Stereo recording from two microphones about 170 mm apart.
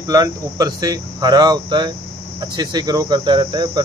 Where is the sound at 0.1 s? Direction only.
20° right (ahead or behind).